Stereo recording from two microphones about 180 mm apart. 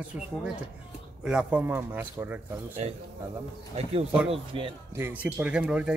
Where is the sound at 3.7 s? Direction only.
35° right (ahead or behind).